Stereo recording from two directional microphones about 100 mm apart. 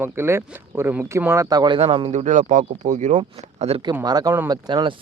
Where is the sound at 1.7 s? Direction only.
60° right (ahead or behind); by 2.2 s 75° right (ahead or behind).